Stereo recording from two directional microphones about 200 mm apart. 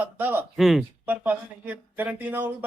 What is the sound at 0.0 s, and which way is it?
Speech, 10° right (ahead or behind).